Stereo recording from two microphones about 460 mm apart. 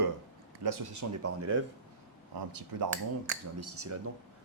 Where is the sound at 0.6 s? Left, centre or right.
Right.